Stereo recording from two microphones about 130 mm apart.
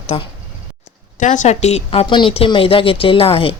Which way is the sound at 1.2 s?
70° left (ahead or behind).